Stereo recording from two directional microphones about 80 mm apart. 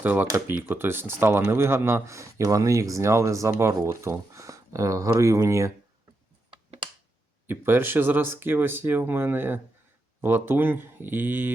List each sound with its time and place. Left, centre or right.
0.0 s speech: right
7.4 s speech: right